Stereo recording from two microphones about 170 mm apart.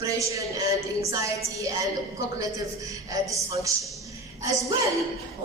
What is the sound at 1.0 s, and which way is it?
Speech, 20° right (ahead or behind).